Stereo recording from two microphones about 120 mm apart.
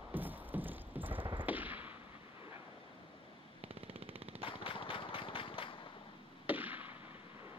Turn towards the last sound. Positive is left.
turn(degrees=-15)  # may be behind; listen again after turning